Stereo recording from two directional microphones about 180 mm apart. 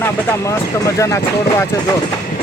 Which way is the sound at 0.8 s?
15° left (ahead or behind).